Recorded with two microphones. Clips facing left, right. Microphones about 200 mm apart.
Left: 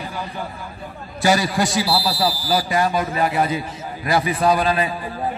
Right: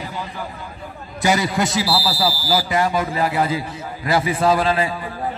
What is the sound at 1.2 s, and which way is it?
Speech, 20° right (ahead or behind).